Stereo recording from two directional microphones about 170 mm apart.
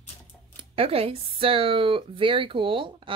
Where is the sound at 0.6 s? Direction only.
35° right (ahead or behind).